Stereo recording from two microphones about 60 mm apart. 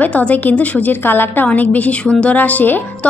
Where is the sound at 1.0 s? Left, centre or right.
Left.